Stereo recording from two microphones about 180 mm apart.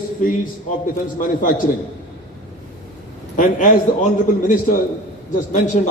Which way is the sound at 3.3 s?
45° left (ahead or behind).